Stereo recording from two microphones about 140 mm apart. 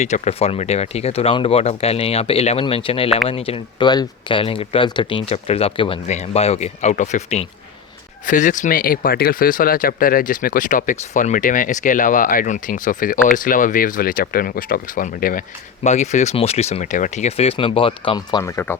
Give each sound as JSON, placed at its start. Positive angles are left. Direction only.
{"t": 0.0, "sound": "speech", "side_deg": 50}
{"t": 6.1, "sound": "speech", "side_deg": 50}
{"t": 18.4, "sound": "speech", "side_deg": 20}